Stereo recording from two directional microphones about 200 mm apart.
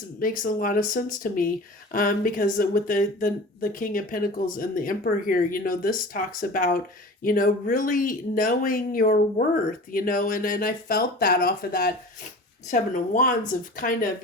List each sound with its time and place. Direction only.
0.2 s speech: 45° left (ahead or behind)